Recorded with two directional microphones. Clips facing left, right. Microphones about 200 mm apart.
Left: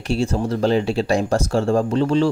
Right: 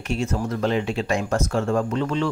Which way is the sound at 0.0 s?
30° left (ahead or behind).